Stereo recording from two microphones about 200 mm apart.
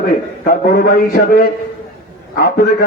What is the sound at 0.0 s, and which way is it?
A man's voice, 45° left (ahead or behind).